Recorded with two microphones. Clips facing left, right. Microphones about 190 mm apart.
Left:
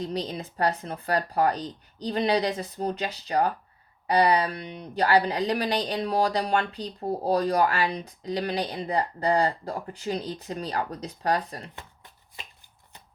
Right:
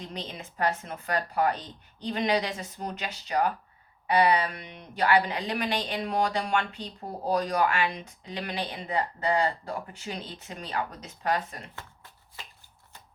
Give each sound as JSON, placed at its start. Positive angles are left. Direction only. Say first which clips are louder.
{"t": 0.0, "sound": "speech", "louder": "left 8 dB", "side_deg": 35}